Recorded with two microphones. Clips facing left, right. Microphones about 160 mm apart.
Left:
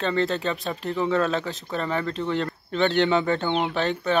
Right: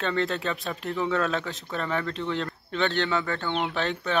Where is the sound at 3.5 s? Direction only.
Centre (ahead or behind).